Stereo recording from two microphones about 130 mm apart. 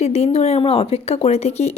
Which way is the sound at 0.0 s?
55° left (ahead or behind).